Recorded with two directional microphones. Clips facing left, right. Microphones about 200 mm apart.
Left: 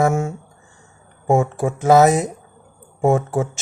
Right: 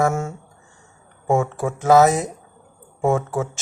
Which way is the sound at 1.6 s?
15° left (ahead or behind).